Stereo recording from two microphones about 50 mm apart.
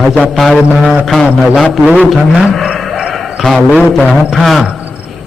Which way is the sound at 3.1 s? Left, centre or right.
Centre.